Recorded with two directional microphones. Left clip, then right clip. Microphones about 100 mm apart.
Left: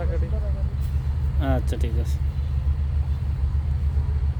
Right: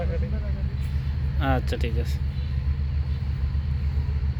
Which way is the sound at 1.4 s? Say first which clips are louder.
Right 2 dB; 10° left (ahead or behind).